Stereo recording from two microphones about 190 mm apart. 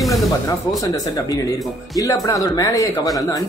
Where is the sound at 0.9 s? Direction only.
20° left (ahead or behind).